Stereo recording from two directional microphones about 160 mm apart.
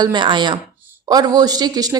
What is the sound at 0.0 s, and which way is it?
A woman's voice, 30° right (ahead or behind).